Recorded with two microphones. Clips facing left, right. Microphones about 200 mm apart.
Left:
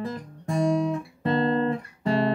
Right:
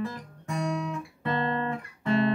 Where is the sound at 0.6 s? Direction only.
30° left (ahead or behind).